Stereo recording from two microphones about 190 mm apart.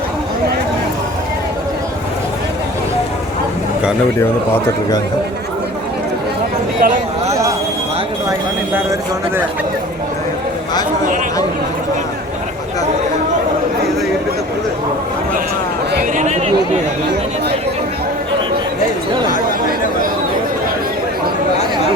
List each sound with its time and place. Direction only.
6.8 s a sound: 45° right (ahead or behind)
8.3 s speech: 15° right (ahead or behind)
16.1 s chatter: 35° right (ahead or behind)